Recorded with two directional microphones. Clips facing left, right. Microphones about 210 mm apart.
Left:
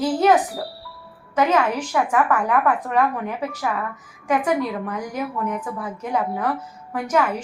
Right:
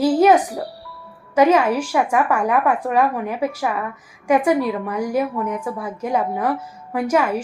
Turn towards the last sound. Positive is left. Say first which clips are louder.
# right 3 dB
turn(degrees=-10)  # may be behind; listen again after turning